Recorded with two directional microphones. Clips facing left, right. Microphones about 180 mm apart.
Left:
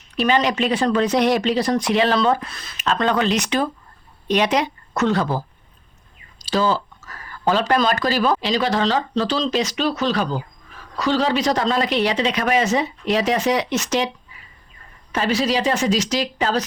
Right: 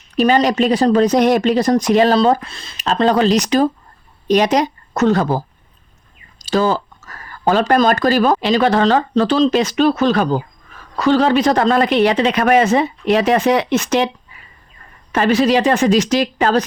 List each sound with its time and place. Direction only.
0.2 s speech: 40° right (ahead or behind)
6.4 s speech: 50° right (ahead or behind)
15.1 s speech: 55° right (ahead or behind)